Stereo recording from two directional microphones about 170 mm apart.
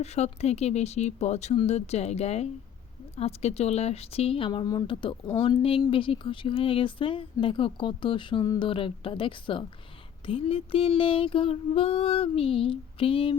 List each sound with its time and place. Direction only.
0.0 s speech: 40° left (ahead or behind)